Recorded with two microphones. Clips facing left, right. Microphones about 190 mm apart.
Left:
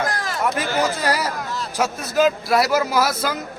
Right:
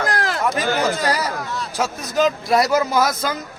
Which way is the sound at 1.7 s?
10° left (ahead or behind).